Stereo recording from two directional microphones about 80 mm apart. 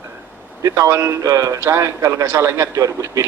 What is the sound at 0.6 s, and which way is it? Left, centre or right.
Speech, right.